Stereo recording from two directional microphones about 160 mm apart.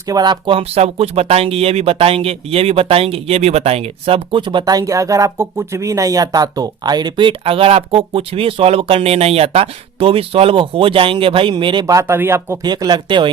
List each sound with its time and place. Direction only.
0.1 s speech: 25° right (ahead or behind)
12.6 s speech: 25° right (ahead or behind)